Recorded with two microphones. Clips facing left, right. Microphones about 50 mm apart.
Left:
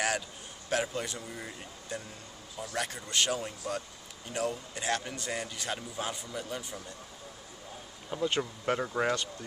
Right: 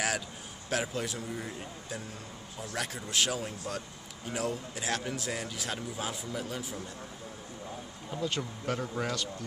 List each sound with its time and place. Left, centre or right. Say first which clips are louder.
0.7 s a man's voice: left 1 dB; centre
8.2 s speech: left 3 dB; left